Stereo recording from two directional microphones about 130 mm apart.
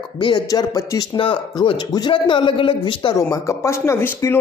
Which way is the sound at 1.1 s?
40° left (ahead or behind).